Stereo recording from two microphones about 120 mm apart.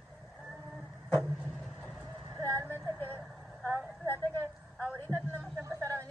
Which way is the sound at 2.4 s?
25° right (ahead or behind).